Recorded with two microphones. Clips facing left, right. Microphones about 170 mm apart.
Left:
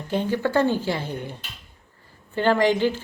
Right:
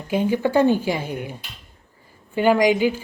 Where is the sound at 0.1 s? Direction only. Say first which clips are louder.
Right 3 dB; 10° right (ahead or behind).